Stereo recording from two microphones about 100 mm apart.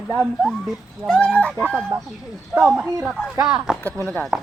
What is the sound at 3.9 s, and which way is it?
Speech, 5° left (ahead or behind).